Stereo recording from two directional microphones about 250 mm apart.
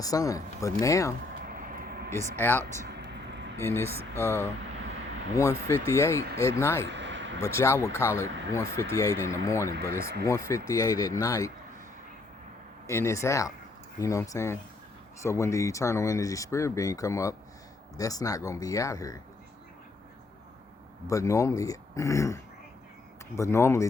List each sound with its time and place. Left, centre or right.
0.0 s speech: centre
1.5 s vehicle: right
2.4 s speech: centre
2.8 s a sound: right
3.6 s speech: centre
6.8 s a sound: right
7.4 s speech: centre
12.9 s speech: centre
21.1 s speech: centre
23.4 s speech: centre